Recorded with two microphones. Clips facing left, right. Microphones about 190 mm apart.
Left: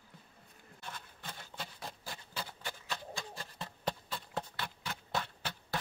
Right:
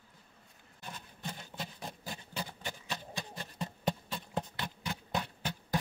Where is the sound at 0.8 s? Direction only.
15° right (ahead or behind).